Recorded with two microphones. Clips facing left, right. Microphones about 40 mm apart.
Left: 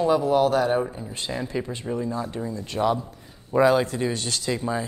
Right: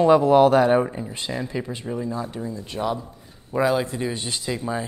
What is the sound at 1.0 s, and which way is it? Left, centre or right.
Speech, centre.